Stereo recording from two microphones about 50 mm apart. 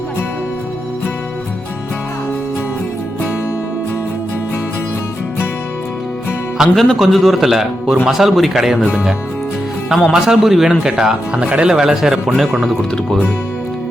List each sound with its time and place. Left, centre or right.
6.6 s a man's voice: centre
10.0 s a man's voice: centre
11.4 s speech: right
11.7 s a man's voice: centre
12.5 s speech: centre